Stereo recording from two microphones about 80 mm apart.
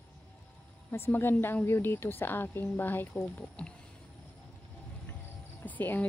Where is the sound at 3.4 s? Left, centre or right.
Centre.